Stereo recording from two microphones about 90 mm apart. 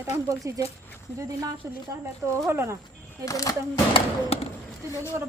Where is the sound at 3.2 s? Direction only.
40° left (ahead or behind).